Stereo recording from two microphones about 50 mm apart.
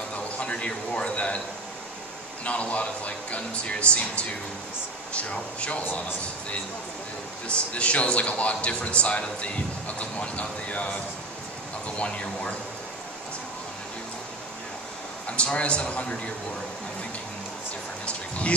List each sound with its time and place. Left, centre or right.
0.4 s a man's voice: left
2.4 s speech: left
7.4 s speech: left
12.0 s speech: left
15.2 s speech: left